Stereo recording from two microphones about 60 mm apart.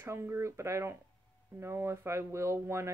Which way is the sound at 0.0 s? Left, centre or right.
Right.